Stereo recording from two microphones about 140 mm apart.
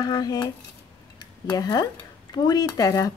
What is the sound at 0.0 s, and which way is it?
Speech, 30° left (ahead or behind).